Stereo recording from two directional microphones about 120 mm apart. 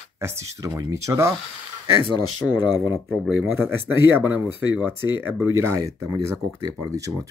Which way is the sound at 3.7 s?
15° right (ahead or behind).